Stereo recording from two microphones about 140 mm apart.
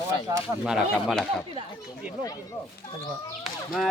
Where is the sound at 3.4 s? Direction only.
Centre (ahead or behind).